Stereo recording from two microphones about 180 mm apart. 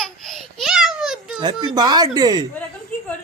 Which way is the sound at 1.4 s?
25° right (ahead or behind).